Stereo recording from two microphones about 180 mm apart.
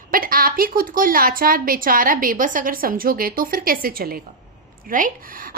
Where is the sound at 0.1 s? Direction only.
50° right (ahead or behind).